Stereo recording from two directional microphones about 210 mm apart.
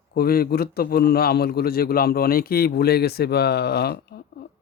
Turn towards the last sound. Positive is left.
turn(degrees=50)  # may be behind; listen again after turning